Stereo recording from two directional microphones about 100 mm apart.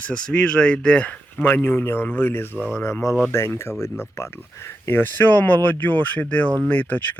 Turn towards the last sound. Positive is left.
turn(degrees=15)  # may be behind; listen again after turning